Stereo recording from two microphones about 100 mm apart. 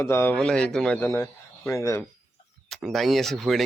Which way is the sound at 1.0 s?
25° left (ahead or behind).